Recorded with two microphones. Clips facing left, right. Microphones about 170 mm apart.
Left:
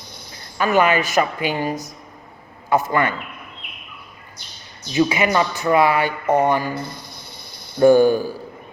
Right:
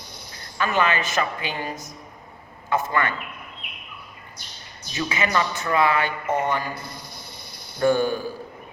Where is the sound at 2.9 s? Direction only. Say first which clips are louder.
Left 4 dB; 20° left (ahead or behind).